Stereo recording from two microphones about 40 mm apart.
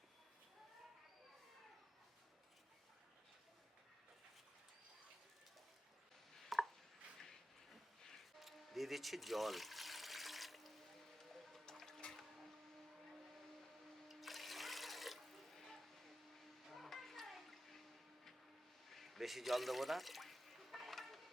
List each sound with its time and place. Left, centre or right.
6.5 s chopping: centre
7.2 s a sound: centre
8.4 s water: centre
11.2 s music: centre
14.1 s water: centre
16.6 s a sound: centre
18.9 s water: centre